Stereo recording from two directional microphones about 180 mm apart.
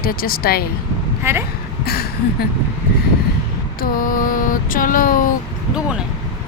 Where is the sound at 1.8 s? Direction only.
60° left (ahead or behind).